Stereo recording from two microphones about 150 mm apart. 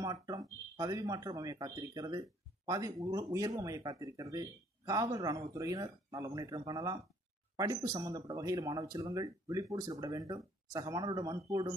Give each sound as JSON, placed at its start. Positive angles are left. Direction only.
{"t": 0.0, "sound": "speech", "side_deg": -25}